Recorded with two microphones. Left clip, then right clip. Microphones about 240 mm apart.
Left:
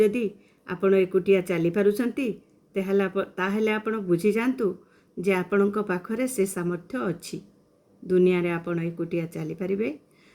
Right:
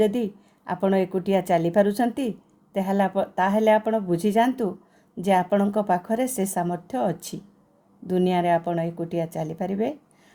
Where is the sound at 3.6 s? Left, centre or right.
Right.